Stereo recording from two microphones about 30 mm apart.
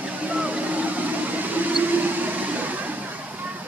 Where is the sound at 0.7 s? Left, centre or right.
Right.